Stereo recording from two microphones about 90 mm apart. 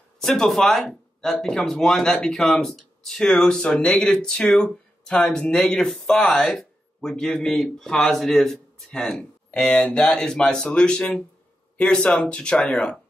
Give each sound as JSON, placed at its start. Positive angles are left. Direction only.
{"t": 0.2, "sound": "speech", "side_deg": 5}